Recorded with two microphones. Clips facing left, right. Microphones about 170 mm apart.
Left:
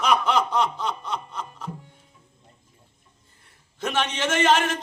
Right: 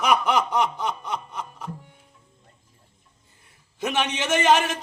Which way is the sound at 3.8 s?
15° right (ahead or behind).